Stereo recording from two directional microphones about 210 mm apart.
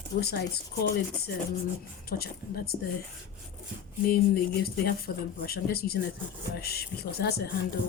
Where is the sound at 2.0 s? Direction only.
45° left (ahead or behind).